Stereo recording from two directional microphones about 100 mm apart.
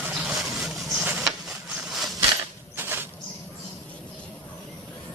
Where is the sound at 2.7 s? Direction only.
25° right (ahead or behind).